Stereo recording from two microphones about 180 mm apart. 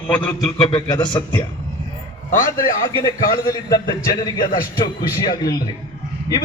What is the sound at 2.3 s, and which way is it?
Speech, 45° left (ahead or behind).